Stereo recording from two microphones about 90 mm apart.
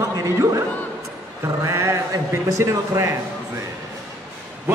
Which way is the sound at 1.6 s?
35° right (ahead or behind).